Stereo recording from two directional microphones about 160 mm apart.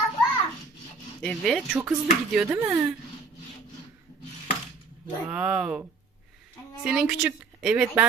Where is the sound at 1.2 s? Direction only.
5° left (ahead or behind).